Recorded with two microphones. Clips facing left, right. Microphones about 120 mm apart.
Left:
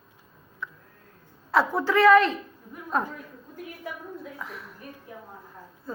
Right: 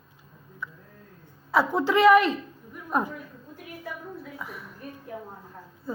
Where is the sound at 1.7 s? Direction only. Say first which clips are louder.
Even; 20° right (ahead or behind).